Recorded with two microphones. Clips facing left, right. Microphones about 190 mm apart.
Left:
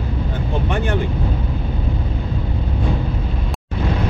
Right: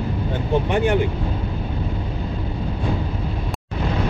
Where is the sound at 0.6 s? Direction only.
15° right (ahead or behind).